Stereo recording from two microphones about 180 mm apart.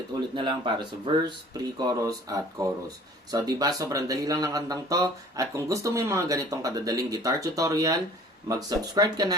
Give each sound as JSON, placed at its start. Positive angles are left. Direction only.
{"t": 0.3, "sound": "speech", "side_deg": -25}